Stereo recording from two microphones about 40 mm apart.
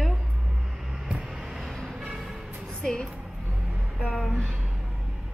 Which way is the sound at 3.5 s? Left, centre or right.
Centre.